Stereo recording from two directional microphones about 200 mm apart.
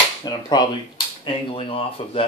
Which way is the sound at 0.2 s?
20° left (ahead or behind).